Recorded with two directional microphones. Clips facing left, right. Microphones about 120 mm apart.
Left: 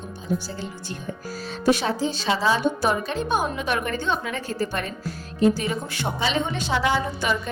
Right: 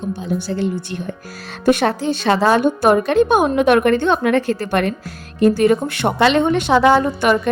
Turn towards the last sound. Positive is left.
turn(degrees=-60)  # may be behind; listen again after turning